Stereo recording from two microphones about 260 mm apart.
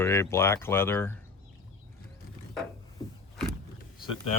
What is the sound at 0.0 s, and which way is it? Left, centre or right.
Speech, centre.